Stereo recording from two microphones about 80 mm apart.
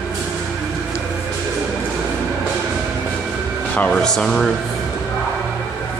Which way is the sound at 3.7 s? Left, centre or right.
Centre.